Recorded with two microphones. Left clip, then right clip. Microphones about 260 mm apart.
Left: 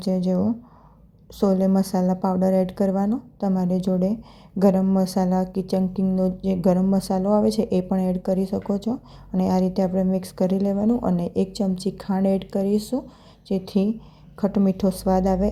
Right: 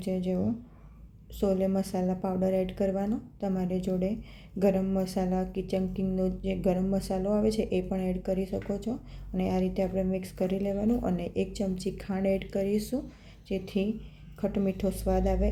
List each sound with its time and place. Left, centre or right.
0.0 s a woman's voice: left